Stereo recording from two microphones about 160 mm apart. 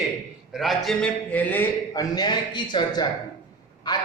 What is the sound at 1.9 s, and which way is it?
A man's voice, 25° left (ahead or behind).